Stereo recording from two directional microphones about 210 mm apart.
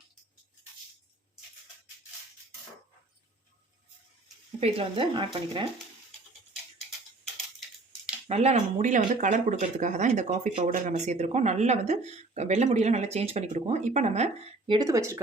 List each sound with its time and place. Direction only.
4.6 s speech: 25° right (ahead or behind)
8.3 s speech: 30° right (ahead or behind)
14.7 s speech: 15° right (ahead or behind)